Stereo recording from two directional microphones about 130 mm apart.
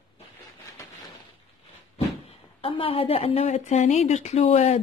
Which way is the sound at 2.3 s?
50° left (ahead or behind).